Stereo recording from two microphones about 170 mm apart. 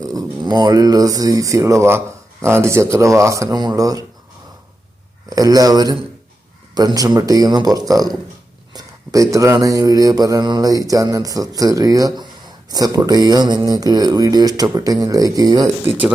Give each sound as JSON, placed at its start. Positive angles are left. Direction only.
{"t": 0.0, "sound": "speech", "side_deg": -20}
{"t": 5.3, "sound": "mantra", "side_deg": -20}
{"t": 9.3, "sound": "mantra", "side_deg": -20}